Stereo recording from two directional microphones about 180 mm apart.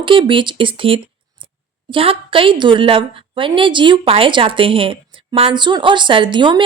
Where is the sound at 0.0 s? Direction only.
30° right (ahead or behind).